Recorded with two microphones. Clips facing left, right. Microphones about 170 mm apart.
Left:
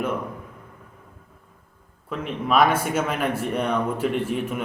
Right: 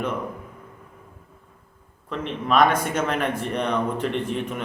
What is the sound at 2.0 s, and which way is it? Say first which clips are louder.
A man's voice: even; 5° left (ahead or behind).